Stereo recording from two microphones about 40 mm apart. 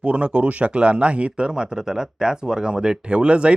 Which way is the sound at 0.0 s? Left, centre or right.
Right.